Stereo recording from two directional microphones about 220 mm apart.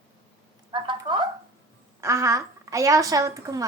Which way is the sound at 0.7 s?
20° right (ahead or behind).